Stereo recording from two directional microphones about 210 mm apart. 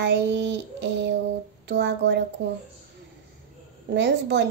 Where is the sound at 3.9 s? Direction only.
55° right (ahead or behind).